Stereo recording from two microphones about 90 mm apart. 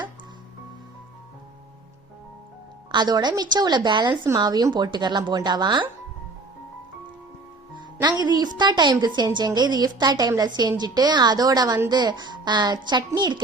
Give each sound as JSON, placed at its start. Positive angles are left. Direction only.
{"t": 2.9, "sound": "a woman's voice", "side_deg": -55}
{"t": 4.4, "sound": "a woman's voice", "side_deg": -45}
{"t": 8.2, "sound": "a woman's voice", "side_deg": -50}